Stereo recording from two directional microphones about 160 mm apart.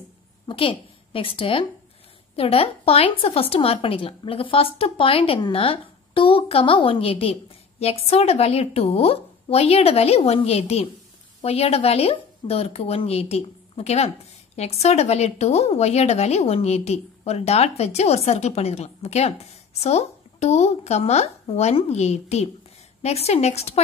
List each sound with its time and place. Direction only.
0.5 s a woman's voice: 35° left (ahead or behind)